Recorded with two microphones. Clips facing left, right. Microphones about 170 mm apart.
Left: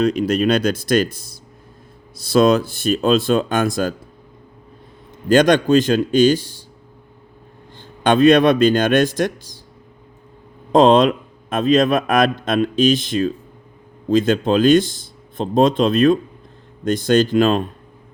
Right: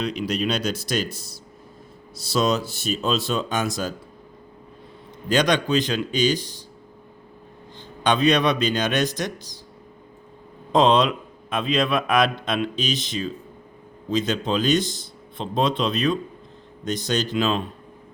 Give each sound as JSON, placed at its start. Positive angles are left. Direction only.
{"t": 0.0, "sound": "a man's voice", "side_deg": 45}
{"t": 5.3, "sound": "a man's voice", "side_deg": 50}
{"t": 7.8, "sound": "a man's voice", "side_deg": 50}
{"t": 10.7, "sound": "a man's voice", "side_deg": 50}